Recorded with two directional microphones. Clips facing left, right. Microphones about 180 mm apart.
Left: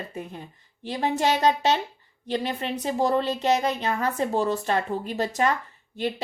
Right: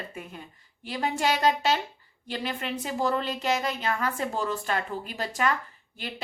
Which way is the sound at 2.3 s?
35° left (ahead or behind).